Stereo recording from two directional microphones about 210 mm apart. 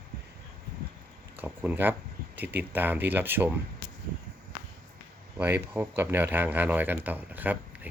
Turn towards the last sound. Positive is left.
turn(degrees=-10)  # may be behind; listen again after turning